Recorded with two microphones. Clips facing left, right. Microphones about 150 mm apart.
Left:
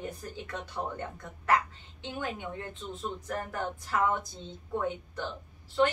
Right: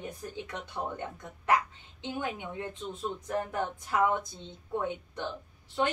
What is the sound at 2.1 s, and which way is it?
Speech, 15° right (ahead or behind).